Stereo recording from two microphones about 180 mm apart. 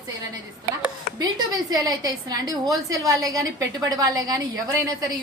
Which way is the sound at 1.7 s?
20° right (ahead or behind).